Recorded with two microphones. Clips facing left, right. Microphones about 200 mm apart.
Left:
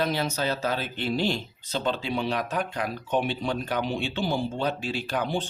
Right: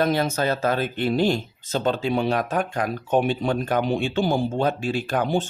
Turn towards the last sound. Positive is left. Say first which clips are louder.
# right 5 dB
turn(degrees=-50)  # may be behind; listen again after turning